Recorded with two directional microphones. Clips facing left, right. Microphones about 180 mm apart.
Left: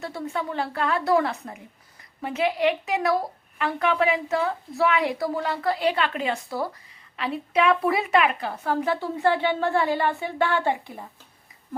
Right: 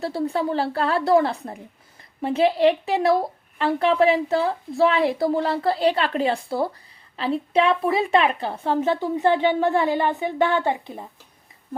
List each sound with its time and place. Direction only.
0.0 s a woman's voice: 30° right (ahead or behind)